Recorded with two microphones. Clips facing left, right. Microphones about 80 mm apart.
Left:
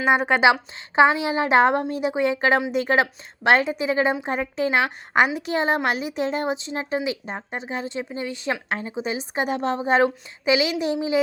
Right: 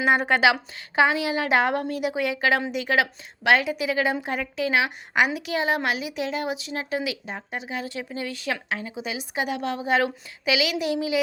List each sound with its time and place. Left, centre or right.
0.3 s a woman's voice: centre